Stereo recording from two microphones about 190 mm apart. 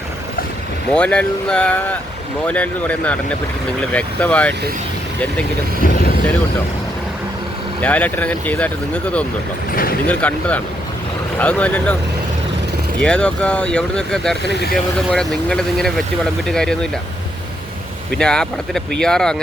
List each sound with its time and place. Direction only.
0.9 s speech: 5° left (ahead or behind)
5.8 s speech: 50° left (ahead or behind)
7.8 s speech: 5° left (ahead or behind)
13.0 s speech: 5° left (ahead or behind)
14.4 s speech: 55° left (ahead or behind)
15.1 s speech: 5° left (ahead or behind)
18.2 s speech: 5° left (ahead or behind)